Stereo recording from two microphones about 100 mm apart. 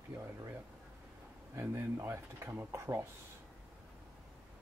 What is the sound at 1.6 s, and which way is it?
Speech, 25° right (ahead or behind).